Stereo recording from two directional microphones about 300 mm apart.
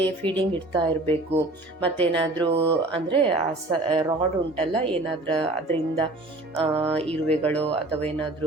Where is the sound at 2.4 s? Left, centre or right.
Centre.